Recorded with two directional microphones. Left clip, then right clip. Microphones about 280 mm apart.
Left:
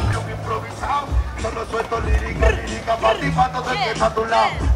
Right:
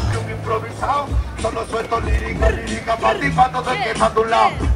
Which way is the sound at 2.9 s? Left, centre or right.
Right.